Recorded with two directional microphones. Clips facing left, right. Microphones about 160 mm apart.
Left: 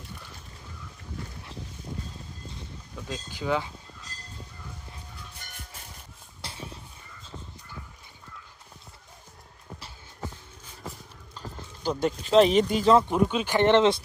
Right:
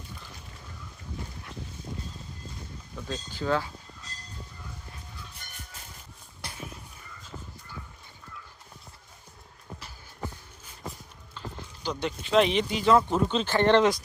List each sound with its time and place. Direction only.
3.1 s speech: 15° left (ahead or behind)
6.4 s a sound: 25° left (ahead or behind)
11.3 s speech: 45° left (ahead or behind)
13.1 s speech: 10° left (ahead or behind)